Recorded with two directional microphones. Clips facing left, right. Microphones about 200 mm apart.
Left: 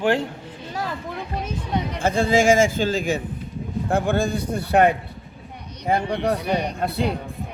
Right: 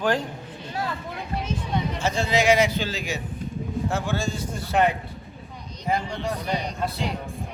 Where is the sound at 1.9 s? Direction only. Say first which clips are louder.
Left 6 dB; 55° left (ahead or behind).